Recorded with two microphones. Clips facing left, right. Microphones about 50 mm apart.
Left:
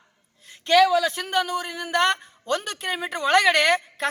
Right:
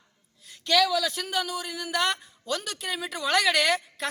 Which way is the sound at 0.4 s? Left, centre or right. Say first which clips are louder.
Left 6 dB; left.